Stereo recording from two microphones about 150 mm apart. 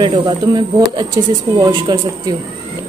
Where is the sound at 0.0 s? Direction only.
30° right (ahead or behind).